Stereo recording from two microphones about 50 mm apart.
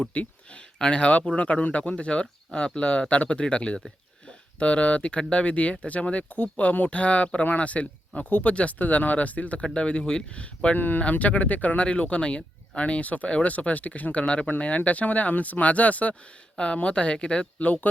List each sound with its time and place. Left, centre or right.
0.0 s speech: left
10.8 s speech: left; by 17.4 s centre
17.6 s speech: left